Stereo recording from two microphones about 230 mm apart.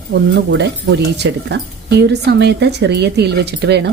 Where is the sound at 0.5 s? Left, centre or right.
Right.